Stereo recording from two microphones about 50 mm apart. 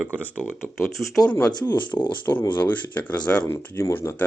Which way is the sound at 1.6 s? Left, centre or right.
Left.